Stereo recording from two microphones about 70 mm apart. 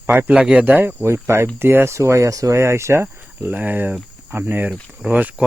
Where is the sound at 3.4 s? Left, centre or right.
Right.